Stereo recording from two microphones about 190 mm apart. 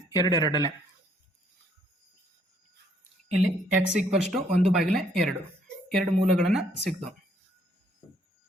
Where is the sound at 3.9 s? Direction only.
Centre (ahead or behind).